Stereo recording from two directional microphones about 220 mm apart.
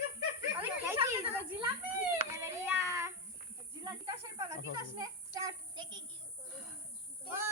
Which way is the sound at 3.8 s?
15° right (ahead or behind).